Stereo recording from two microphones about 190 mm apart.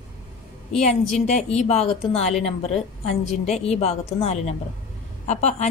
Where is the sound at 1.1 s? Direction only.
35° left (ahead or behind).